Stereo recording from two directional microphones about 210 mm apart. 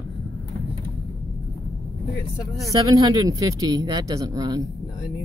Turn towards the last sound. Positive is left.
turn(degrees=-20)  # may be behind; listen again after turning